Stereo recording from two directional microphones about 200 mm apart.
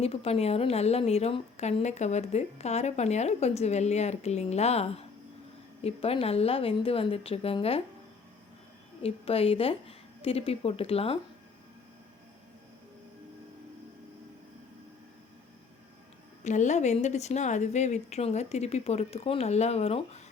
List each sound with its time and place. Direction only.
0.0 s a woman's voice: 30° left (ahead or behind)
9.0 s a woman's voice: 30° left (ahead or behind)
16.4 s a woman's voice: 35° left (ahead or behind)